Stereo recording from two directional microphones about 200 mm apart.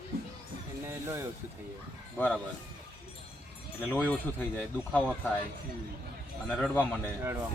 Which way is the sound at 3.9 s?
10° left (ahead or behind).